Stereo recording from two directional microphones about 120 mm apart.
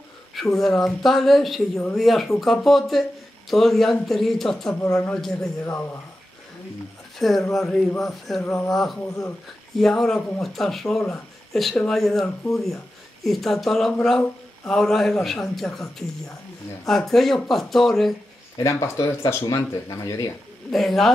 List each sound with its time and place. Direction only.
0.3 s speech: centre (ahead or behind)
7.2 s speech: centre (ahead or behind)
8.4 s speech: 25° left (ahead or behind)
8.6 s speech: 5° left (ahead or behind)
18.6 s speech: 25° left (ahead or behind)
20.7 s speech: centre (ahead or behind)